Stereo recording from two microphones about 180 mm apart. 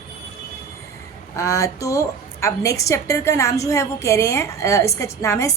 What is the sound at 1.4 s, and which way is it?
A woman's voice, 15° left (ahead or behind).